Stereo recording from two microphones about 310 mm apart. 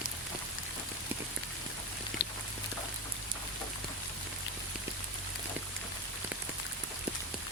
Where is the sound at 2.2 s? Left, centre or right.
Left.